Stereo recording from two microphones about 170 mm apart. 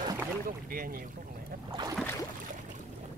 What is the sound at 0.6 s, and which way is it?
Speech, 55° right (ahead or behind).